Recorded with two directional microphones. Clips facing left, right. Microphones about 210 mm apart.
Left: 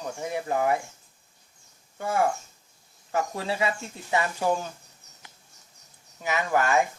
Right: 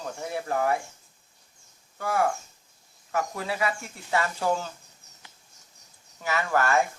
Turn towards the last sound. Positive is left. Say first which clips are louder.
# left 1 dB
turn(degrees=15)  # may be behind; listen again after turning